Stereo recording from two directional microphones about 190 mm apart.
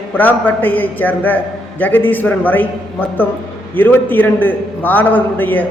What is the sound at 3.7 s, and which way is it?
A man's voice, 10° left (ahead or behind).